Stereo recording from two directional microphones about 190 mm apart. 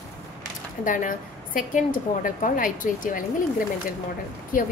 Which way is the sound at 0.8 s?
45° left (ahead or behind).